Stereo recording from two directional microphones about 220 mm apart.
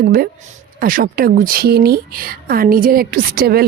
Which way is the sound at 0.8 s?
40° right (ahead or behind).